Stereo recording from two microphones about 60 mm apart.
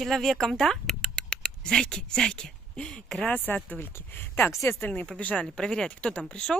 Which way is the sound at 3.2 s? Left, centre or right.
Left.